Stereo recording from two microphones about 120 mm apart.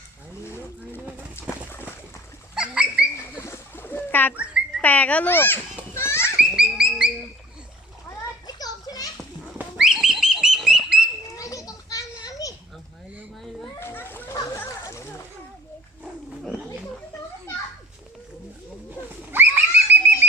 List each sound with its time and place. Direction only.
1.4 s bird: 20° left (ahead or behind)
2.6 s bird: 5° right (ahead or behind)
3.2 s bird: 25° left (ahead or behind)
4.8 s a child's voice: 15° left (ahead or behind)
5.9 s children playing: 20° left (ahead or behind)
6.3 s livestock: 5° right (ahead or behind)
8.4 s children playing: 30° left (ahead or behind)
9.7 s pig: 5° right (ahead or behind)
11.2 s children playing: 30° left (ahead or behind)
13.7 s a sound: 20° left (ahead or behind)
14.5 s splash: 25° left (ahead or behind)
18.9 s a sound: 20° right (ahead or behind)